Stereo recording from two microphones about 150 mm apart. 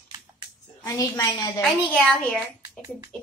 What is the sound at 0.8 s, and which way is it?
Speech, 25° left (ahead or behind).